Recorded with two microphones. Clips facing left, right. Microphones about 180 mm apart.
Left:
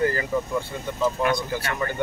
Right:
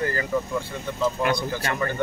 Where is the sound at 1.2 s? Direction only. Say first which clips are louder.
Even; 30° right (ahead or behind).